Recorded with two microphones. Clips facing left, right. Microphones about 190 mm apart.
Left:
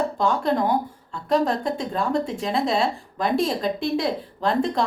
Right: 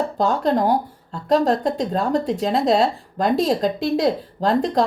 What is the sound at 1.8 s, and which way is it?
Speech, 40° right (ahead or behind).